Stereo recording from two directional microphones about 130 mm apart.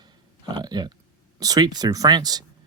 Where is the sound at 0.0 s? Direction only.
30° right (ahead or behind).